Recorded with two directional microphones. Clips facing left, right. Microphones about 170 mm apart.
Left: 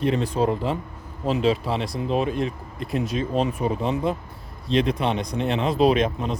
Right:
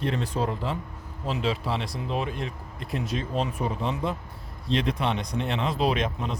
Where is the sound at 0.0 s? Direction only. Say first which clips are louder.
Left 6 dB; 15° left (ahead or behind).